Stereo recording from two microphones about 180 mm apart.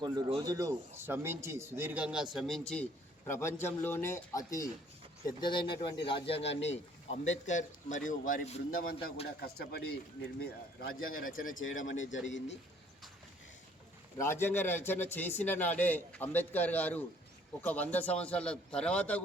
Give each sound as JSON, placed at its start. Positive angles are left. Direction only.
{"t": 0.0, "sound": "speech", "side_deg": -20}
{"t": 3.2, "sound": "a man's voice", "side_deg": 15}
{"t": 8.7, "sound": "speech", "side_deg": 55}
{"t": 11.5, "sound": "speech", "side_deg": 90}
{"t": 14.2, "sound": "a man's voice", "side_deg": 15}